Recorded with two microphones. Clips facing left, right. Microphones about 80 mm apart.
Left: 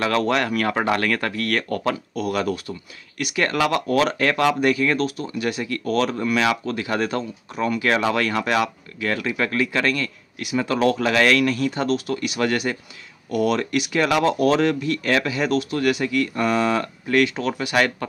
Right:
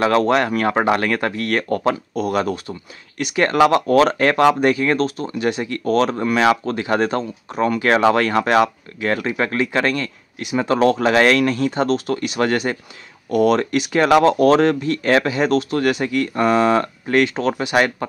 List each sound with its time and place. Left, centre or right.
0.0 s speech: right